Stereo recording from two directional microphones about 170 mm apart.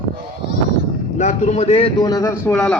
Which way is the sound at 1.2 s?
40° left (ahead or behind).